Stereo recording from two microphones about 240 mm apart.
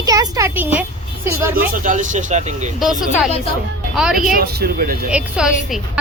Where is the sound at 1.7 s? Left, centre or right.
Right.